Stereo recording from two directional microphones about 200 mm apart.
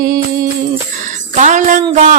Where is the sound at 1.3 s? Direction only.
35° right (ahead or behind).